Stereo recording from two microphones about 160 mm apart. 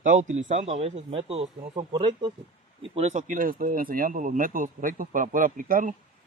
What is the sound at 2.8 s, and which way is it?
Speech, 45° right (ahead or behind).